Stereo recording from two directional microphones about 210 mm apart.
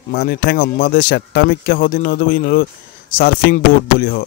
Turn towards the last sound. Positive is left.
turn(degrees=45)  # may be behind; listen again after turning